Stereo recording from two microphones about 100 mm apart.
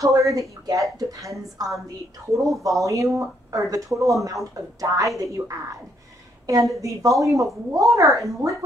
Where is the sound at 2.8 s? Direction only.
30° right (ahead or behind).